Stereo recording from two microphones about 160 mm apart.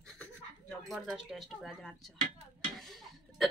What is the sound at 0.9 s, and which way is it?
Speech, centre (ahead or behind).